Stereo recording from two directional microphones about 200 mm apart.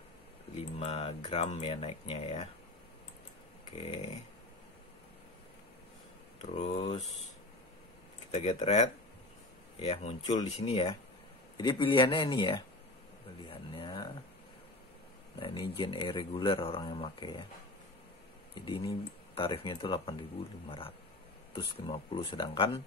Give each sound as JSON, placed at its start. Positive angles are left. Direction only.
{"t": 0.7, "sound": "speech", "side_deg": 30}
{"t": 3.8, "sound": "speech", "side_deg": 30}
{"t": 6.5, "sound": "speech", "side_deg": 30}
{"t": 8.3, "sound": "speech", "side_deg": 30}
{"t": 15.3, "sound": "speech", "side_deg": 25}
{"t": 18.5, "sound": "speech", "side_deg": 25}
{"t": 21.5, "sound": "speech", "side_deg": 25}